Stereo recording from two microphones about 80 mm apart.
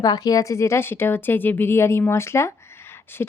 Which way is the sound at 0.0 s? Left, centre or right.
Left.